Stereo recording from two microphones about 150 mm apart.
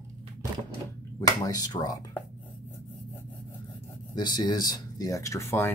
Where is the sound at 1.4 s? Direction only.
25° left (ahead or behind).